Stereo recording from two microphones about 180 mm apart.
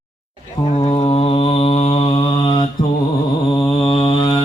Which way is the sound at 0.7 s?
25° left (ahead or behind).